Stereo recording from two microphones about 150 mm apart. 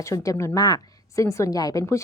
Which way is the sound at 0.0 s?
20° left (ahead or behind).